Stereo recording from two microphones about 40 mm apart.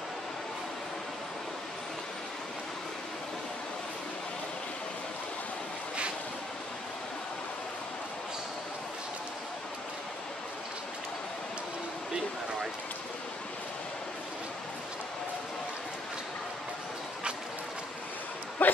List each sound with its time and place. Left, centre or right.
18.6 s dog: left